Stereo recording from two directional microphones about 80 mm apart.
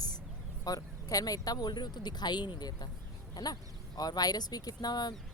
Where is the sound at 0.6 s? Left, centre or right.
Left.